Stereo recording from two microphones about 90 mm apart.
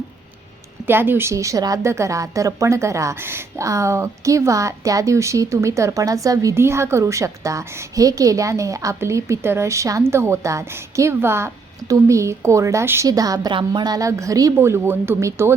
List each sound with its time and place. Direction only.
0.9 s a woman's voice: 25° right (ahead or behind)
13.1 s a woman's voice: 45° right (ahead or behind)
13.5 s a woman's voice: 60° right (ahead or behind); by 14.5 s 40° right (ahead or behind)
14.5 s speech: 30° right (ahead or behind)